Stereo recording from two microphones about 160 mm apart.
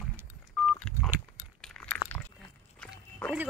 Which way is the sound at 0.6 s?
10° left (ahead or behind).